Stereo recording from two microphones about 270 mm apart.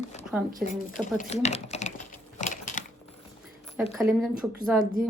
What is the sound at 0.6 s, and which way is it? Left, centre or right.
Speech, left.